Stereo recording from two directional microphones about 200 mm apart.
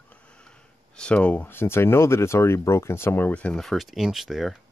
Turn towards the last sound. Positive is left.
turn(degrees=0)  # may be behind; listen again after turning